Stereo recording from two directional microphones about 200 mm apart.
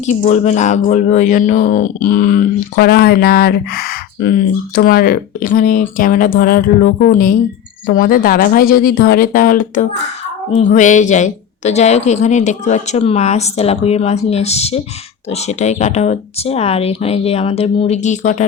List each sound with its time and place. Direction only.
0.0 s a woman's voice: 35° left (ahead or behind)